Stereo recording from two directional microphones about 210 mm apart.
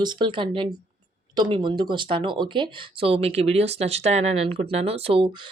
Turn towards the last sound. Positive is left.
turn(degrees=-25)  # may be behind; listen again after turning